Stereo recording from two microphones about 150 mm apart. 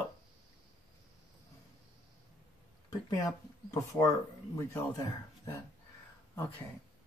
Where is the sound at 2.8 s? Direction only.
25° left (ahead or behind).